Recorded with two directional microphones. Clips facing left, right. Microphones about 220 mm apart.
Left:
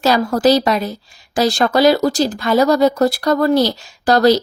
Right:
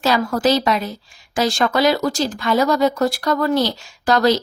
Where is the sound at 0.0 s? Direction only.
40° left (ahead or behind).